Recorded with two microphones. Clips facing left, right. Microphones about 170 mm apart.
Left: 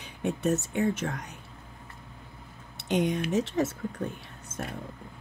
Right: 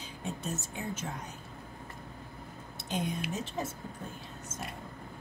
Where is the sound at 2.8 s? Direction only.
70° left (ahead or behind).